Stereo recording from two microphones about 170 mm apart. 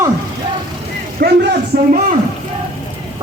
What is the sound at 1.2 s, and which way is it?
Speech, 60° right (ahead or behind).